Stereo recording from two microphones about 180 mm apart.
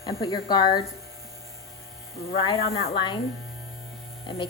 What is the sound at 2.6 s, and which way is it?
Speech, 35° left (ahead or behind).